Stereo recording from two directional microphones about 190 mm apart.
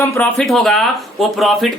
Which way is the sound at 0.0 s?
15° left (ahead or behind).